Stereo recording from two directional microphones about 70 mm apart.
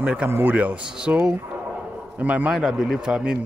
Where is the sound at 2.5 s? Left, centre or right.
Centre.